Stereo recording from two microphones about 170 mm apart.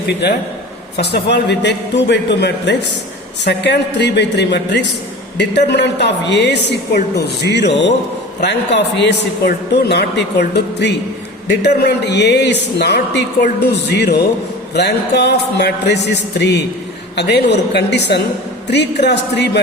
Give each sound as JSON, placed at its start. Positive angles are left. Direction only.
{"t": 0.2, "sound": "a woman's voice", "side_deg": 85}